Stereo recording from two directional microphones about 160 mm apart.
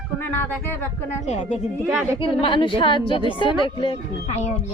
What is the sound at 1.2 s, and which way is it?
Speech, 45° left (ahead or behind).